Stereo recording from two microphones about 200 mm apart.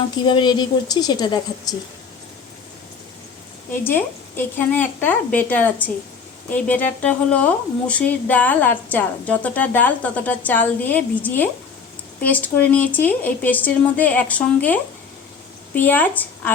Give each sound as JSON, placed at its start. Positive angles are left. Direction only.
{"t": 0.3, "sound": "a woman's voice", "side_deg": 20}
{"t": 3.8, "sound": "a woman's voice", "side_deg": 10}